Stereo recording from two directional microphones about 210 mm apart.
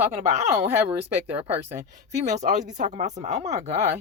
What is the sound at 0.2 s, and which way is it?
Speech, 30° right (ahead or behind).